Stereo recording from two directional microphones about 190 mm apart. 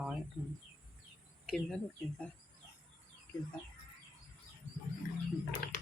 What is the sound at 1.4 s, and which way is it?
Speech, centre (ahead or behind).